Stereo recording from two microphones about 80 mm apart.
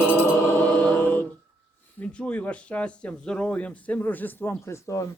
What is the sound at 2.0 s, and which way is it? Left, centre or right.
Speech, centre.